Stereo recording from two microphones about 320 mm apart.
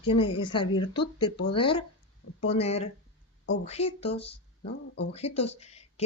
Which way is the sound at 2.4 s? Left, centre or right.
Centre.